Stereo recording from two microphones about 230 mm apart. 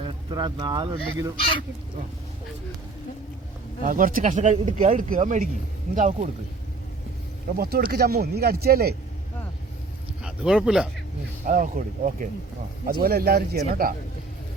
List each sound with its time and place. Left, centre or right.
0.0 s speech: centre
3.8 s speech: right
7.6 s speech: right
10.2 s speech: centre
11.4 s speech: right